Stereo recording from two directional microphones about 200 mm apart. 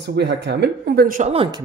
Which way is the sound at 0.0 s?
55° right (ahead or behind).